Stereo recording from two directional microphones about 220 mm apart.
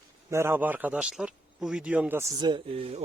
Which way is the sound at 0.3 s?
10° right (ahead or behind).